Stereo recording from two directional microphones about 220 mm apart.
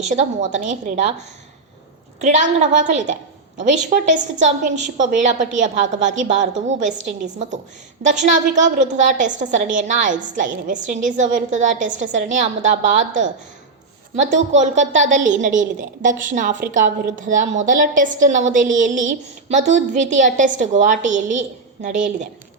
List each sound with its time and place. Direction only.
0.0 s a woman's voice: 30° right (ahead or behind)
2.2 s a woman's voice: 35° right (ahead or behind)
8.0 s a woman's voice: 35° right (ahead or behind)
14.5 s a woman's voice: 35° right (ahead or behind)